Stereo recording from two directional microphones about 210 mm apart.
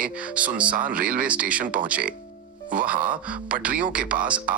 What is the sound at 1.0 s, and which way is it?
Speech, 40° right (ahead or behind).